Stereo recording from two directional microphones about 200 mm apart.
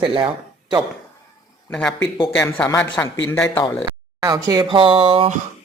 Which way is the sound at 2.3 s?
15° left (ahead or behind).